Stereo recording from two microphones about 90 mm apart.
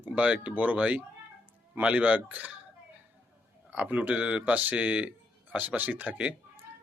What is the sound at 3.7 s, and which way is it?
Speech, 15° right (ahead or behind).